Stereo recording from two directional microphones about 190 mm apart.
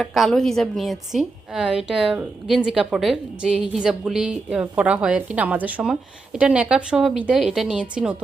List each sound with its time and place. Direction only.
0.0 s a woman's voice: centre (ahead or behind)